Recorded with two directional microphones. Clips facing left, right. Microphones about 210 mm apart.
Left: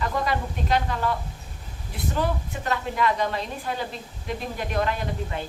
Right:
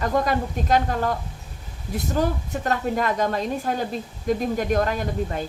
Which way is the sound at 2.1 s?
45° right (ahead or behind).